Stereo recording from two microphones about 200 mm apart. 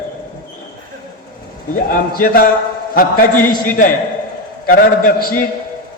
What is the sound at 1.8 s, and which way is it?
Speech, 45° left (ahead or behind).